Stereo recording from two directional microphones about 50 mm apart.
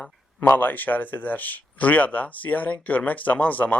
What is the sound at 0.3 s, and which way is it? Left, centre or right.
Speech, left.